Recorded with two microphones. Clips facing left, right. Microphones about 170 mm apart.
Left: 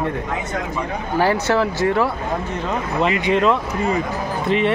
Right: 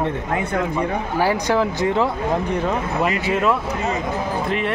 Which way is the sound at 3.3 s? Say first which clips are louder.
Left 3 dB; 5° right (ahead or behind).